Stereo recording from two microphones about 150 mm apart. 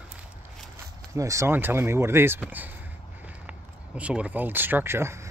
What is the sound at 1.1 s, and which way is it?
Speech, 20° right (ahead or behind).